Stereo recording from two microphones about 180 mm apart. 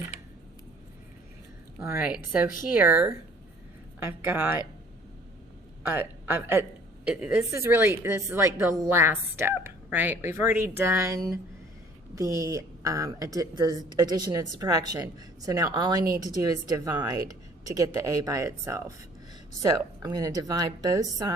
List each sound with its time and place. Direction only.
1.9 s a woman's voice: 5° right (ahead or behind)
5.8 s a woman's voice: 10° right (ahead or behind)